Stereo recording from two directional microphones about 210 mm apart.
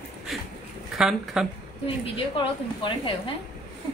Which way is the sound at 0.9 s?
Centre (ahead or behind).